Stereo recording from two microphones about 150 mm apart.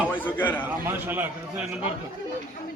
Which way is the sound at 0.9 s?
15° right (ahead or behind).